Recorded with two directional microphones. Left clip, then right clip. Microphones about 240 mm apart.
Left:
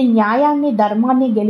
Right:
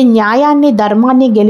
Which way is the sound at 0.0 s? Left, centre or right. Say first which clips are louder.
Right 5 dB; right.